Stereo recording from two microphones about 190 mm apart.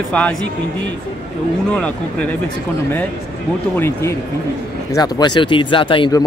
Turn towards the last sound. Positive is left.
turn(degrees=25)  # may be behind; listen again after turning